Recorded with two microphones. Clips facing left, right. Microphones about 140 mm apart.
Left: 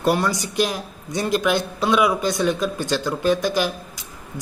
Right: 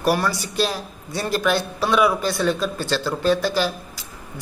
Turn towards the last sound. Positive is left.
turn(degrees=15)  # may be behind; listen again after turning